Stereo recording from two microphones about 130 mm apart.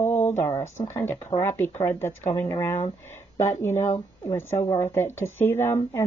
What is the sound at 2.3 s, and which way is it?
Speech, 50° left (ahead or behind).